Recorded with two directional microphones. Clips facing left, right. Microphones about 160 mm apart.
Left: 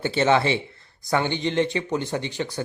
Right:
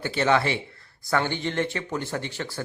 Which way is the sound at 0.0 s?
25° left (ahead or behind).